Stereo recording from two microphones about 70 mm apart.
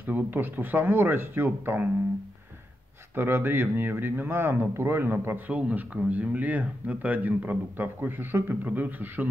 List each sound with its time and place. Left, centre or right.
0.0 s speech: right
3.2 s speech: right
5.5 s speech: centre